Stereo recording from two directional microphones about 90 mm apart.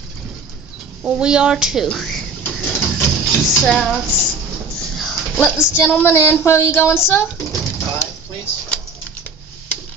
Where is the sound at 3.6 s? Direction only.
Centre (ahead or behind).